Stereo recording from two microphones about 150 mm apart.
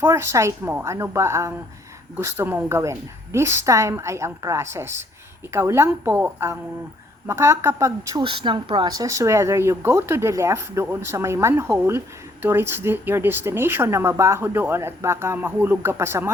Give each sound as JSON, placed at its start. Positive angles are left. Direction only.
{"t": 0.0, "sound": "a woman's voice", "side_deg": -15}
{"t": 8.2, "sound": "speech", "side_deg": -35}